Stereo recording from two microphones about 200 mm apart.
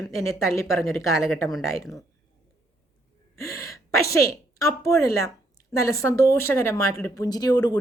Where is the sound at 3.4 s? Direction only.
15° left (ahead or behind).